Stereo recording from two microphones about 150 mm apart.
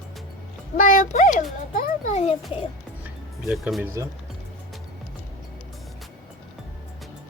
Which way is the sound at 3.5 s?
5° right (ahead or behind).